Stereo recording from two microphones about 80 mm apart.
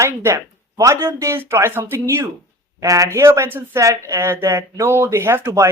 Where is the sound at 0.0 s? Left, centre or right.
Right.